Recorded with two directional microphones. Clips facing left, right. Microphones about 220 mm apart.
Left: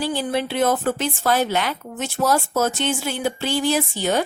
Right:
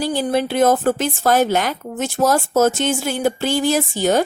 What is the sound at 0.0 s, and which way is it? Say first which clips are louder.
Speech: right 4 dB; 45° right (ahead or behind).